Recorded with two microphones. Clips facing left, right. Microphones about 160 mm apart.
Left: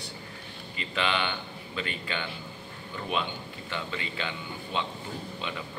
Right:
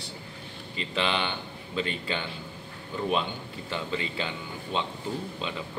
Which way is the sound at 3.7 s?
30° right (ahead or behind).